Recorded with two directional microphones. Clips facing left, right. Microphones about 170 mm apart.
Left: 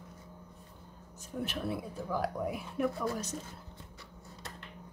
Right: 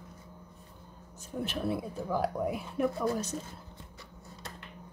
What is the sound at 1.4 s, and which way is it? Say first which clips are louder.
Speech: right 3 dB; 25° right (ahead or behind).